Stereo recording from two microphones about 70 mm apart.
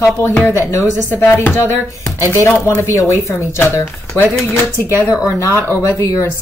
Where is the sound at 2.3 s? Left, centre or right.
Left.